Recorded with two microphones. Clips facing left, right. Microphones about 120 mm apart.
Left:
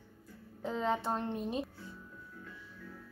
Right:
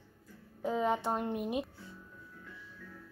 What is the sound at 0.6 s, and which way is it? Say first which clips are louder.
Speech: right 2 dB; 10° right (ahead or behind).